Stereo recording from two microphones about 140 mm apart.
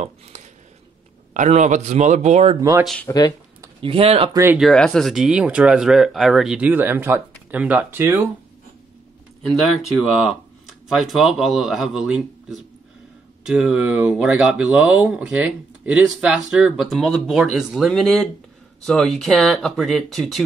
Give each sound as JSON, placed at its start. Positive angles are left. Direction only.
{"t": 0.0, "sound": "speech", "side_deg": -55}
{"t": 3.1, "sound": "speech", "side_deg": 25}
{"t": 3.8, "sound": "speech", "side_deg": -45}
{"t": 4.3, "sound": "speech", "side_deg": -20}
{"t": 4.6, "sound": "speech", "side_deg": 0}
{"t": 9.8, "sound": "speech", "side_deg": -5}